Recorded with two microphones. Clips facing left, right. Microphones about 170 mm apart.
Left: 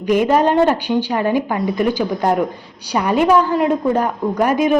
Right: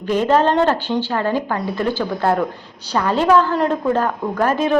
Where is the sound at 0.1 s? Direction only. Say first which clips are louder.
Left 2 dB; 10° left (ahead or behind).